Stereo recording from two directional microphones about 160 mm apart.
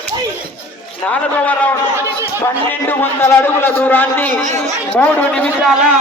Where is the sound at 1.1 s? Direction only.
10° left (ahead or behind).